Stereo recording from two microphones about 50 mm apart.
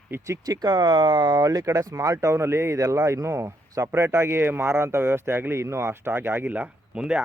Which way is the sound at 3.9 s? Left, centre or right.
Right.